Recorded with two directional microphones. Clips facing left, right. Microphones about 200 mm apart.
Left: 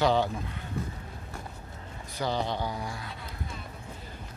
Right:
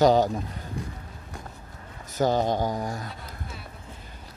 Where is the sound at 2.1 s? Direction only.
45° right (ahead or behind).